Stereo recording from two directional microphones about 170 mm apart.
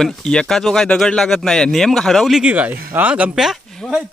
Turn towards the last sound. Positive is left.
turn(degrees=0)  # may be behind; listen again after turning